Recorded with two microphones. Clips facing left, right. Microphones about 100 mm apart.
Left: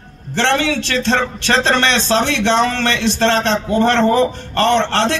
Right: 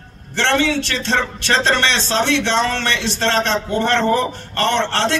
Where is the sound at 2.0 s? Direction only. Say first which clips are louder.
Left 3 dB; 20° left (ahead or behind).